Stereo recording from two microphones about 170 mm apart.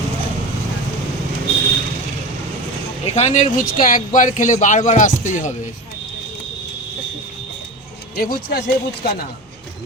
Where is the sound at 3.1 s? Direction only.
45° left (ahead or behind).